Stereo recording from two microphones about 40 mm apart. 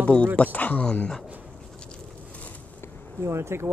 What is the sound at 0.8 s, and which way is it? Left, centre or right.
Speech, left.